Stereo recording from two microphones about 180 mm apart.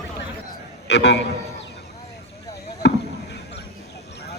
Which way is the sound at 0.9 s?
70° left (ahead or behind).